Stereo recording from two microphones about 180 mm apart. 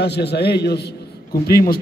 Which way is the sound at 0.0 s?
70° left (ahead or behind).